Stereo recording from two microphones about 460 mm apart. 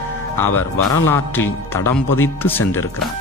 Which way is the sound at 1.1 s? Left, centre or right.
Centre.